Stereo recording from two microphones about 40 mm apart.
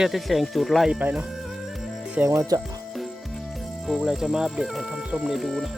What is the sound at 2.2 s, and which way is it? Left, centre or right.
Speech, right.